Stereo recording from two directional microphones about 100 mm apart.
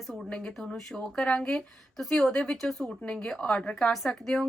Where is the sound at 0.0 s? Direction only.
Centre (ahead or behind).